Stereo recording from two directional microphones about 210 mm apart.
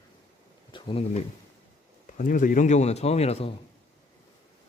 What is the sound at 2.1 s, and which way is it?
Speech, 40° left (ahead or behind).